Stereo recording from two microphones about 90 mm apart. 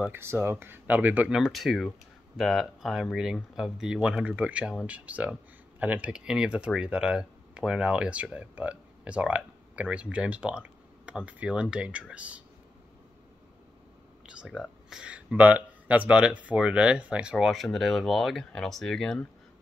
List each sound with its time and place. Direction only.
0.1 s speech: 25° right (ahead or behind)
1.4 s speech: centre (ahead or behind)
14.2 s a sound: 10° right (ahead or behind)
14.9 s speech: 10° right (ahead or behind)
17.4 s speech: centre (ahead or behind)